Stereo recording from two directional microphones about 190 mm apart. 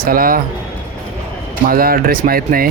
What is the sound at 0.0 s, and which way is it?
Speech, 50° right (ahead or behind).